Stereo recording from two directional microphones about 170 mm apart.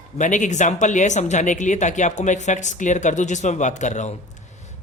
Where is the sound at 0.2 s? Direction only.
45° left (ahead or behind).